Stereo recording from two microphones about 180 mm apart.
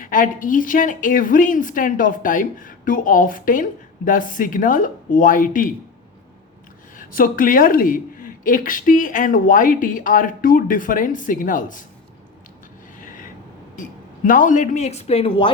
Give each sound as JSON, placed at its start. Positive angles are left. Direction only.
{"t": 0.0, "sound": "a woman's voice", "side_deg": 45}
{"t": 6.9, "sound": "a woman's voice", "side_deg": 50}
{"t": 14.3, "sound": "speech", "side_deg": 45}